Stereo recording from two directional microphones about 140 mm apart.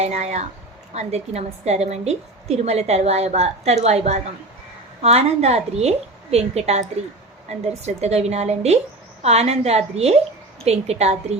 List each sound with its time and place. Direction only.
0.0 s a woman's voice: 50° right (ahead or behind)